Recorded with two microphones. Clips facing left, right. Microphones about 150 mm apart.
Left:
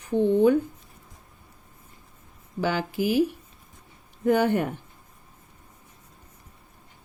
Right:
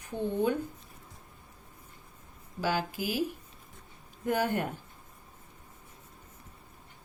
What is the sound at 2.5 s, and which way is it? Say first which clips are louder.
Speech: left 5 dB; 70° left (ahead or behind).